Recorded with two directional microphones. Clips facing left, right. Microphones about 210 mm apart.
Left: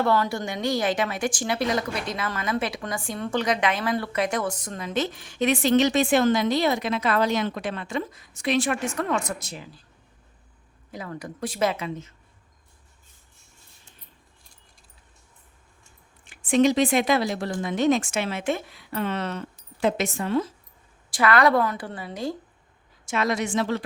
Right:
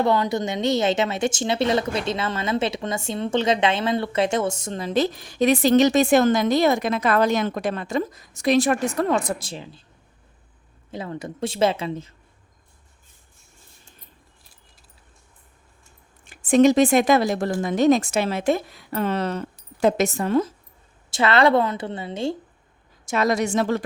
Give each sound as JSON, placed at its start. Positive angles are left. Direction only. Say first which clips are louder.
{"t": 0.0, "sound": "a woman's voice", "louder": "right 3 dB", "side_deg": -20}
{"t": 10.9, "sound": "a woman's voice", "louder": "right 4 dB", "side_deg": -25}
{"t": 16.3, "sound": "a woman's voice", "louder": "right 4 dB", "side_deg": -45}
{"t": 21.1, "sound": "a woman's voice", "louder": "right 2 dB", "side_deg": -25}
{"t": 23.0, "sound": "speech", "louder": "right 4 dB", "side_deg": -40}